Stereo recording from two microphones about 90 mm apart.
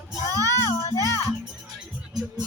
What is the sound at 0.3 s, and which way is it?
Speech, 45° right (ahead or behind).